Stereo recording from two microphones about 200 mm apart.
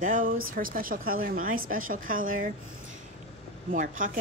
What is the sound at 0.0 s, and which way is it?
A woman's voice, 45° right (ahead or behind).